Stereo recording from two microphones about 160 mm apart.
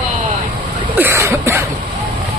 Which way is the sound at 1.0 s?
15° right (ahead or behind).